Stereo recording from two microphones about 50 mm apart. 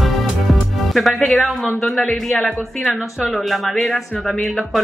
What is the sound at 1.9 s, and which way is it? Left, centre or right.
Speech, centre.